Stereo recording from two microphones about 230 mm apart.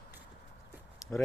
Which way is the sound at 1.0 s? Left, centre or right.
Centre.